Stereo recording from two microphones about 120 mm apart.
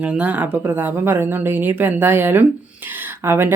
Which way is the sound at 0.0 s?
10° right (ahead or behind).